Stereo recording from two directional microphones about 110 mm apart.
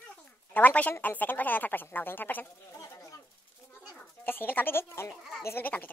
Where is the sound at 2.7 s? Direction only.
30° left (ahead or behind).